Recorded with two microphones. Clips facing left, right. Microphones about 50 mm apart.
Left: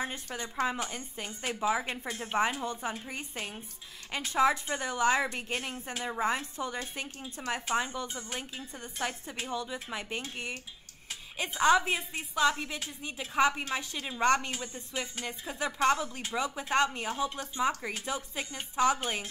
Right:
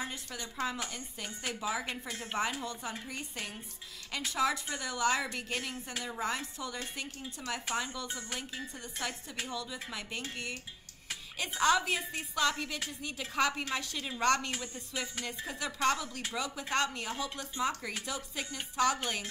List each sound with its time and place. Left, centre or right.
0.0 s a woman's voice: left
14.6 s a woman's voice: left